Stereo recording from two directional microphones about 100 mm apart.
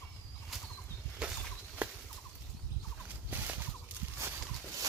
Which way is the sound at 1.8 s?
15° right (ahead or behind).